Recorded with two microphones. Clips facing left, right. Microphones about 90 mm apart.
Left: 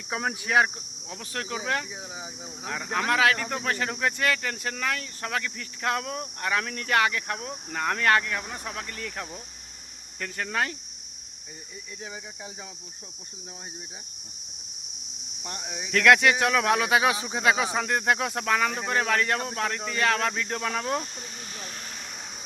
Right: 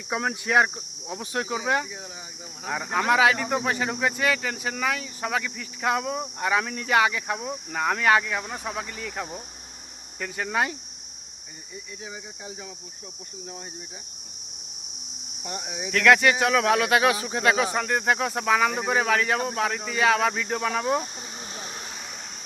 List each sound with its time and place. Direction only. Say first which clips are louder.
0.2 s speech: right 1 dB; centre (ahead or behind)
1.0 s speech: right 5 dB; 20° right (ahead or behind)
15.4 s speech: right 3 dB; 5° right (ahead or behind)
16.8 s speech: right 2 dB; 15° left (ahead or behind); by 21.8 s 20° right (ahead or behind)